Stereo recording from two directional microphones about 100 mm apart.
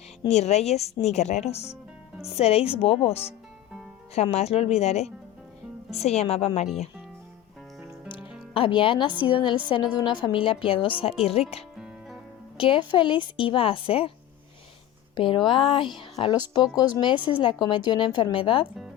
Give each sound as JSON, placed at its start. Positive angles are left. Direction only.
{"t": 0.3, "sound": "speech", "side_deg": 90}
{"t": 2.7, "sound": "speech", "side_deg": 75}
{"t": 4.1, "sound": "speech", "side_deg": 90}
{"t": 8.5, "sound": "a woman's voice", "side_deg": 60}
{"t": 11.2, "sound": "speech", "side_deg": 75}
{"t": 11.8, "sound": "music", "side_deg": -5}
{"t": 12.5, "sound": "speech", "side_deg": 60}
{"t": 15.1, "sound": "speech", "side_deg": 55}
{"t": 16.7, "sound": "a woman's voice", "side_deg": 45}